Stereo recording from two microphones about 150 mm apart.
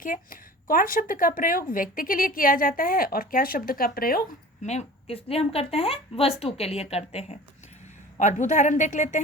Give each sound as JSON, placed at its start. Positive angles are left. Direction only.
{"t": 0.0, "sound": "a woman's voice", "side_deg": 70}
{"t": 4.6, "sound": "a woman's voice", "side_deg": 45}